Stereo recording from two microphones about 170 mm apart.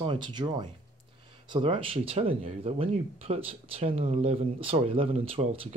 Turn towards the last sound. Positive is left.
turn(degrees=-35)  # may be behind; listen again after turning